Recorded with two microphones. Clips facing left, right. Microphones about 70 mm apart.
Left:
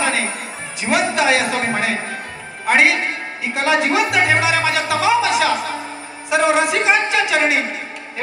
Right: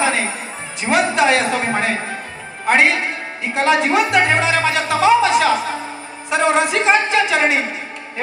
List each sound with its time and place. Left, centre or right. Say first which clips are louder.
0.0 s music: right 1 dB; centre
0.8 s a woman's voice: right 2 dB; centre